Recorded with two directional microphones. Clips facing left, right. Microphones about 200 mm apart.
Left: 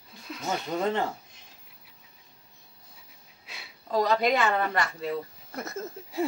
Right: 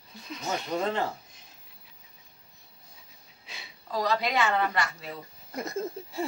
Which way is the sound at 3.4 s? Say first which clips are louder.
Even; 5° left (ahead or behind).